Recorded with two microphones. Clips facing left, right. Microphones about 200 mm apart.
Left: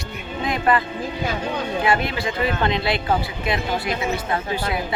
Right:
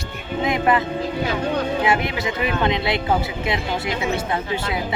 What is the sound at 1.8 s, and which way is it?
A woman's voice, 20° right (ahead or behind).